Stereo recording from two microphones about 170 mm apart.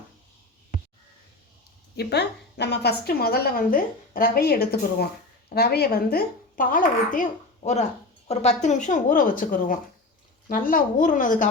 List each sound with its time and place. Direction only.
2.0 s a woman's voice: 75° left (ahead or behind); by 11.4 s 50° left (ahead or behind)